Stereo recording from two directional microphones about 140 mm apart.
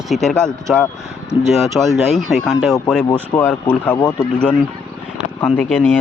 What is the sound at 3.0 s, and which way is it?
Speech, 25° left (ahead or behind).